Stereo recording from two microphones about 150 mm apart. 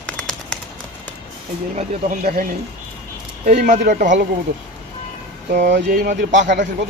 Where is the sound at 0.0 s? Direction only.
5° left (ahead or behind).